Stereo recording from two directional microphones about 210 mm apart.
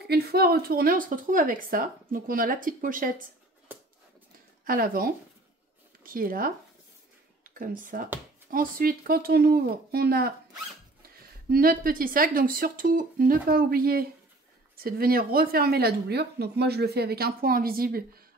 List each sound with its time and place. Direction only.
0.0 s speech: 50° right (ahead or behind)
4.6 s speech: 45° right (ahead or behind)
11.5 s speech: 45° right (ahead or behind)